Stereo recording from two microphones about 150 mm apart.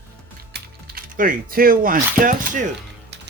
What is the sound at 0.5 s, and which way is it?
Speech, 85° right.